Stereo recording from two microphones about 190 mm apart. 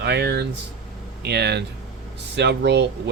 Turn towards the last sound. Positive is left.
turn(degrees=-65)  # may be behind; listen again after turning